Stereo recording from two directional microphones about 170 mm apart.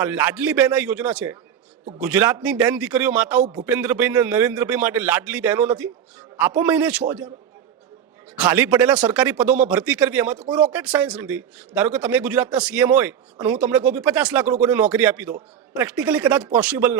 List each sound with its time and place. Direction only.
0.0 s speech: 10° right (ahead or behind)
8.4 s speech: 10° right (ahead or behind)